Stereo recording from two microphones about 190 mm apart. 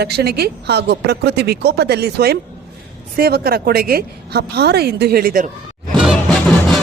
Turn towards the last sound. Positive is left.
turn(degrees=0)  # may be behind; listen again after turning